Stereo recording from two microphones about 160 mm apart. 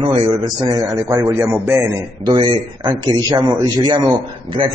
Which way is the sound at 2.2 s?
30° right (ahead or behind).